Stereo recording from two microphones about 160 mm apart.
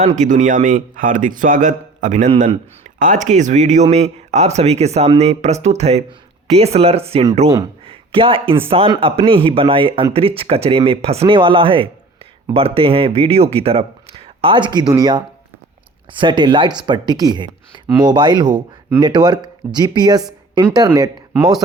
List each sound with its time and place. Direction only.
0.0 s a man's voice: 50° right (ahead or behind)
7.9 s a sound: 35° right (ahead or behind)
8.9 s speech: 35° right (ahead or behind)